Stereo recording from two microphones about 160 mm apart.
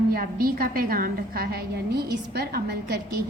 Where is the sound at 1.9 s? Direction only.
85° right.